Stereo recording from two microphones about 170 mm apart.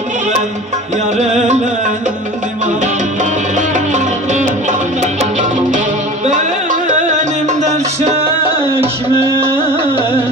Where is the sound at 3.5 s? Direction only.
45° right (ahead or behind).